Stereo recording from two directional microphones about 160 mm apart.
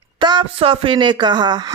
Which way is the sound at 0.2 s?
30° right (ahead or behind).